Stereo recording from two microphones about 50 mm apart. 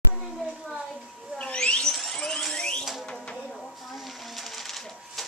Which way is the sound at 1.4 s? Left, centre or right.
Left.